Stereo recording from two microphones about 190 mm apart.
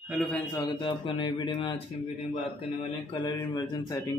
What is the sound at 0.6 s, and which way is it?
Speech, 25° left (ahead or behind).